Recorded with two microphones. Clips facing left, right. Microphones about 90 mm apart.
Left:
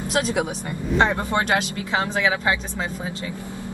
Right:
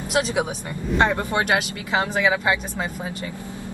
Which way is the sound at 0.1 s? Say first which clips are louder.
Right 1 dB; 15° right (ahead or behind).